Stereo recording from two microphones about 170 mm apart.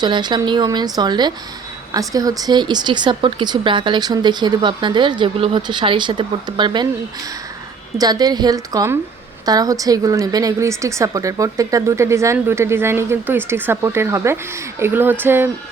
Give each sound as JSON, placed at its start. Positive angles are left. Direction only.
{"t": 0.0, "sound": "speech", "side_deg": -25}
{"t": 7.9, "sound": "a woman's voice", "side_deg": -25}